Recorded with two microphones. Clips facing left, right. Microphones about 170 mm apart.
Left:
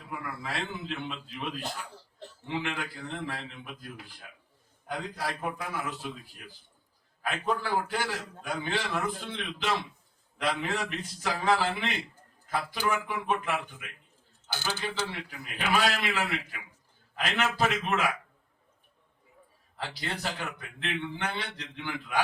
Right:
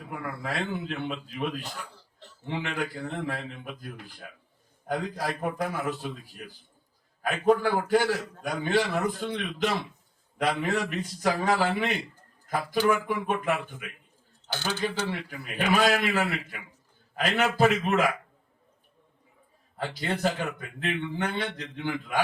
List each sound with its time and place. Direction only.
0.0 s a man's voice: 40° right (ahead or behind)
13.1 s a man's voice: 45° right (ahead or behind)
19.7 s a man's voice: 45° right (ahead or behind)